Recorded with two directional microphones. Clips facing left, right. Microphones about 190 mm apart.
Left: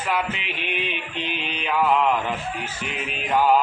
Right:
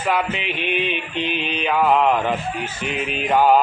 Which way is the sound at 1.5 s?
65° right (ahead or behind).